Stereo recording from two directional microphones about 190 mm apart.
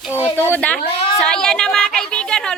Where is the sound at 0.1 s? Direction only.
15° left (ahead or behind).